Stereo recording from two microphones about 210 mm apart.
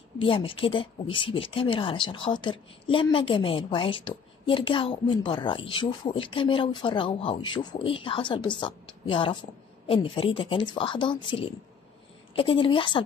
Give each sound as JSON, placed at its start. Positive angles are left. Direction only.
{"t": 0.2, "sound": "speech", "side_deg": 25}